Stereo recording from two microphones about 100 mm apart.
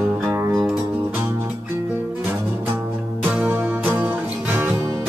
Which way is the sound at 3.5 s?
20° right (ahead or behind).